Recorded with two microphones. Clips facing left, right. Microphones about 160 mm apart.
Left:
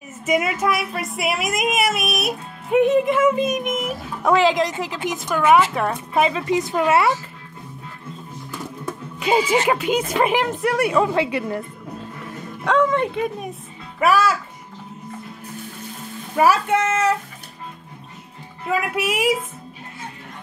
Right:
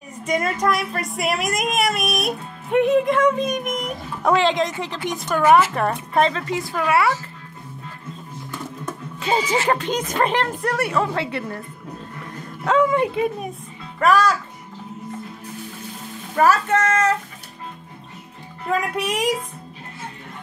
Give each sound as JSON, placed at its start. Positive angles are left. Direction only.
{"t": 0.2, "sound": "a woman's voice", "side_deg": 5}
{"t": 6.4, "sound": "a woman's voice", "side_deg": 20}
{"t": 8.8, "sound": "music", "side_deg": 10}
{"t": 9.7, "sound": "a woman's voice", "side_deg": 10}
{"t": 12.3, "sound": "a child's voice", "side_deg": -5}
{"t": 16.3, "sound": "a woman's voice", "side_deg": 10}
{"t": 18.7, "sound": "a woman's voice", "side_deg": 5}